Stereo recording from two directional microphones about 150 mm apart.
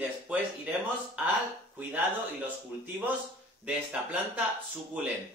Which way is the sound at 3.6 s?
5° right (ahead or behind).